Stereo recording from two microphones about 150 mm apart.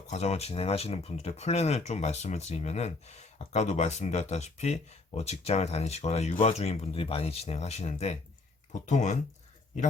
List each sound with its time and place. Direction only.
0.1 s speech: 45° left (ahead or behind)